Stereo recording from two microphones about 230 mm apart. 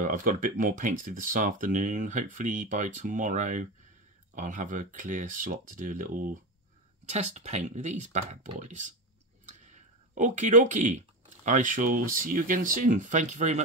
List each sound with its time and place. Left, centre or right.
0.0 s speech: right